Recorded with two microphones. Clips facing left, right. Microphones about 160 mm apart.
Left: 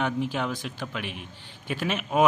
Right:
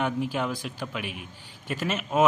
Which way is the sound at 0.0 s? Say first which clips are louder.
Even; 5° right (ahead or behind).